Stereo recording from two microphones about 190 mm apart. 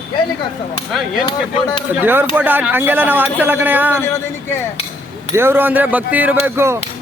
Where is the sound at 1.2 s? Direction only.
20° left (ahead or behind).